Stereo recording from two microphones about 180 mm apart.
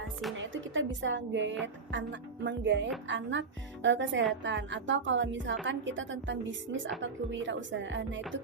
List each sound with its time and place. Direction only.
0.5 s a woman's voice: 90° right